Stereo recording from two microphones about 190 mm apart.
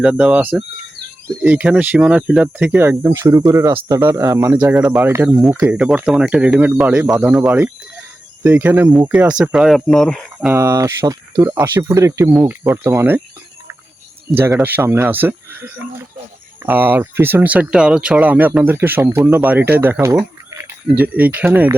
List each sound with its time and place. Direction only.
0.0 s speech: 5° right (ahead or behind)
10.5 s speech: 15° right (ahead or behind)
14.3 s speech: 15° right (ahead or behind)